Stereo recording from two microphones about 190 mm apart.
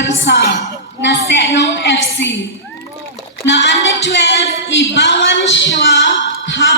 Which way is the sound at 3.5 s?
65° left (ahead or behind).